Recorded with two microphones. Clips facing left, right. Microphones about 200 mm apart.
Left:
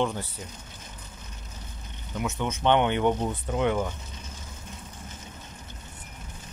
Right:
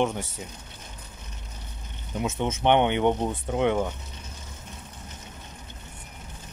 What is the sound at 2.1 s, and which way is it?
Speech, 25° right (ahead or behind).